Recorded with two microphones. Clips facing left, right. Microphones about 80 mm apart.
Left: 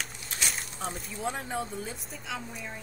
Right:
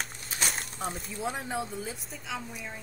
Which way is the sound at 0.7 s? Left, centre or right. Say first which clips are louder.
Right 1 dB; centre.